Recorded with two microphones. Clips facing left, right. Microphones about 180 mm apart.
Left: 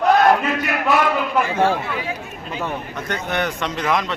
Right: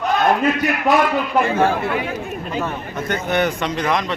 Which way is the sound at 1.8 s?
55° right (ahead or behind).